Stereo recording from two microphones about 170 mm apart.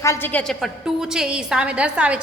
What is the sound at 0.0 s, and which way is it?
A woman's voice, 15° left (ahead or behind).